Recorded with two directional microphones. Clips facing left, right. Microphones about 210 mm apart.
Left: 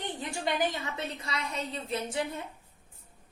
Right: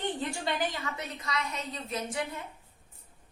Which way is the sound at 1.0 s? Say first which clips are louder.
Even; 30° left (ahead or behind).